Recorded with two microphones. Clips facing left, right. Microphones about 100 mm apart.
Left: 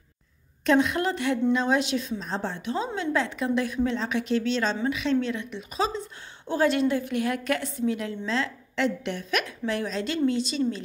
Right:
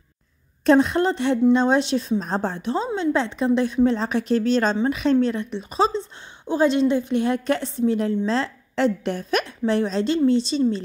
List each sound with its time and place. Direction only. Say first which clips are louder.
0.7 s a woman's voice: right 5 dB; 35° right (ahead or behind)
2.1 s a woman's voice: right 7 dB; 45° right (ahead or behind); by 10.8 s 30° right (ahead or behind)